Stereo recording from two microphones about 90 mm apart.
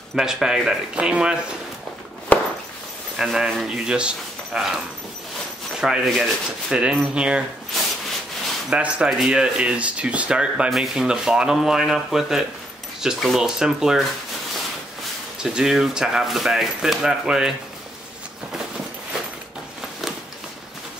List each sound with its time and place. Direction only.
0.1 s speech: 5° right (ahead or behind)
2.3 s a sound: 20° left (ahead or behind)
3.2 s speech: 5° right (ahead or behind)
8.6 s speech: 10° right (ahead or behind)
15.4 s speech: 5° right (ahead or behind)